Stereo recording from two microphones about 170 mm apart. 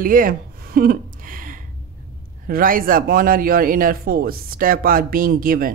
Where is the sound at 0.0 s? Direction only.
55° right (ahead or behind).